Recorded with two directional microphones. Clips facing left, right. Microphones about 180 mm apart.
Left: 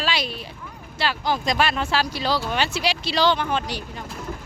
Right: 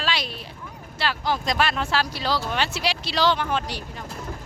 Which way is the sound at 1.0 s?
Centre (ahead or behind).